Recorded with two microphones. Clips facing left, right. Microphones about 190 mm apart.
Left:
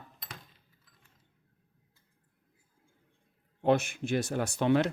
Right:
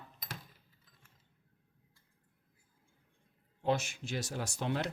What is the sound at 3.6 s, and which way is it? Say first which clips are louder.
Speech: left 7 dB; 60° left (ahead or behind).